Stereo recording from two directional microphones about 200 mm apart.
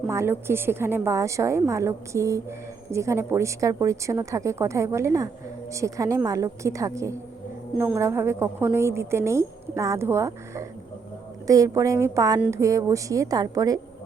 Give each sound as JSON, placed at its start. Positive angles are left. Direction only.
{"t": 0.1, "sound": "a woman's voice", "side_deg": -15}